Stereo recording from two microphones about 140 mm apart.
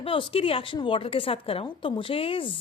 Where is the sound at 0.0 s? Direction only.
40° left (ahead or behind).